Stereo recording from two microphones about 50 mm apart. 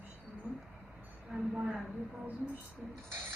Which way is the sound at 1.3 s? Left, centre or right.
Right.